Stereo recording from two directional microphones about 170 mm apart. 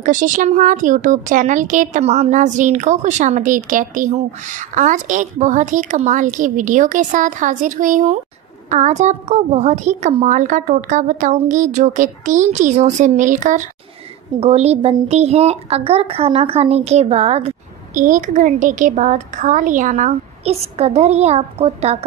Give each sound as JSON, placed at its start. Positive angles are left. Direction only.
{"t": 0.0, "sound": "a woman's voice", "side_deg": -50}